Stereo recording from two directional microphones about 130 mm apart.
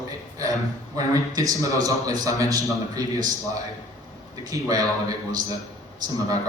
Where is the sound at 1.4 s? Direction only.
25° right (ahead or behind).